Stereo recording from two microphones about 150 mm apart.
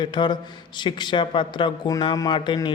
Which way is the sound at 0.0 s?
30° left (ahead or behind).